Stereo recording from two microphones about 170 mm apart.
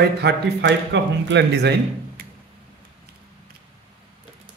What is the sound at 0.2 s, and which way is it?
Speech, 85° right.